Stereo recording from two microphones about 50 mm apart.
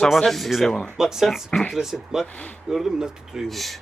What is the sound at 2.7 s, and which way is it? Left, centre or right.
Speech, centre.